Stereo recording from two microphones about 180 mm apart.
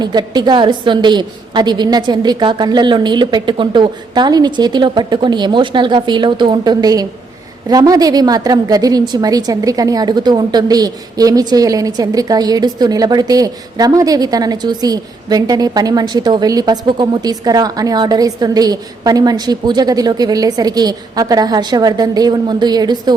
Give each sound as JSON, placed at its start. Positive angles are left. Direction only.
{"t": 0.0, "sound": "a woman's voice", "side_deg": -25}